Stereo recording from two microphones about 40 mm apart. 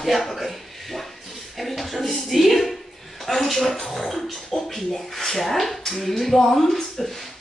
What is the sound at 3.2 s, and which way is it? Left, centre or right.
Speech, centre.